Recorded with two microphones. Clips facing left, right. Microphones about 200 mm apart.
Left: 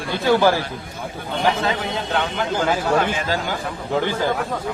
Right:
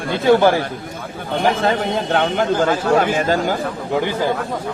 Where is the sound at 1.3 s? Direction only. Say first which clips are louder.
Right 4 dB; 50° right (ahead or behind).